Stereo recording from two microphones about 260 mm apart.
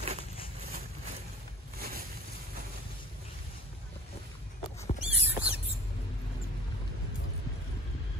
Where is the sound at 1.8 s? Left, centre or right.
Right.